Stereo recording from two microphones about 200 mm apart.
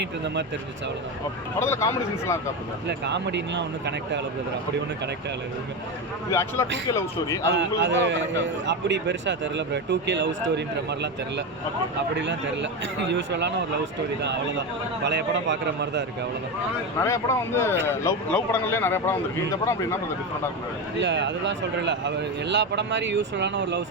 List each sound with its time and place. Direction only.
1.6 s speech: 15° left (ahead or behind)
2.8 s speech: 60° right (ahead or behind)
6.3 s speech: 15° left (ahead or behind)
7.8 s speech: 65° right (ahead or behind)
15.0 s speech: 60° right (ahead or behind)
17.0 s speech: 15° left (ahead or behind)
21.0 s speech: 60° right (ahead or behind)